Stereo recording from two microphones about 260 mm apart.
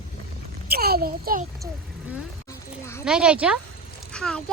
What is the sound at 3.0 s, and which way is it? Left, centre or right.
Speech, centre.